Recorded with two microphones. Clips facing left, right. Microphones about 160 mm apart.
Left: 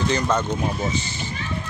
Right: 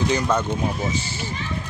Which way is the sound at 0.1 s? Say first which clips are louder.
Right 1 dB; 10° right (ahead or behind).